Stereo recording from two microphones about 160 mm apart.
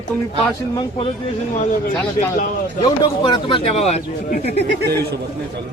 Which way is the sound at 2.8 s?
30° left (ahead or behind).